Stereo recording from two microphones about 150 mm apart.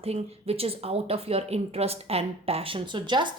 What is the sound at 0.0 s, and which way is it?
Speech, 40° right (ahead or behind).